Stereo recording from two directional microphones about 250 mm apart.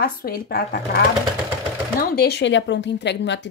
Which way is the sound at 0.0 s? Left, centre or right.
Left.